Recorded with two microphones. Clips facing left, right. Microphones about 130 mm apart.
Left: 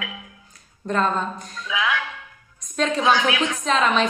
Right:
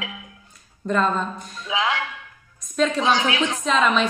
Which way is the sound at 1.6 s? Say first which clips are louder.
Right 1 dB; 30° right (ahead or behind).